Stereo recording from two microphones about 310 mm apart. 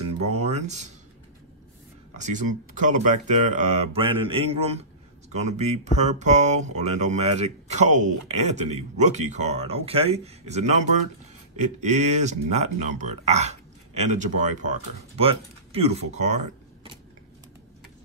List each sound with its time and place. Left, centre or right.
0.0 s music: right
2.1 s speech: right